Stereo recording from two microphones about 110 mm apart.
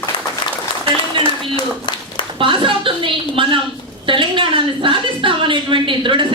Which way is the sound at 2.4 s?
50° right (ahead or behind).